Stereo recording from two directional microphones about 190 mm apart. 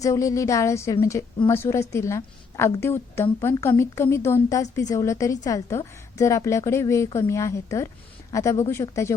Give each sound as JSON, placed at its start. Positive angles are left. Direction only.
{"t": 0.0, "sound": "a woman's voice", "side_deg": 15}